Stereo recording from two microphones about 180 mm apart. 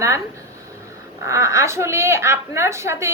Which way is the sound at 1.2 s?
15° right (ahead or behind).